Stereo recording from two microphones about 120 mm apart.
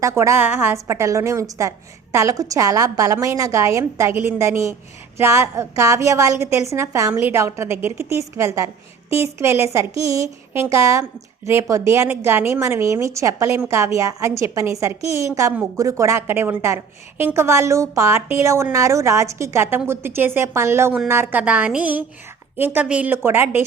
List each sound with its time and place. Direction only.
0.0 s a woman's voice: 25° right (ahead or behind)